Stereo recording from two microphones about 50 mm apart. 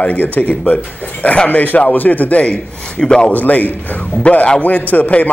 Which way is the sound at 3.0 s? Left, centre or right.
Centre.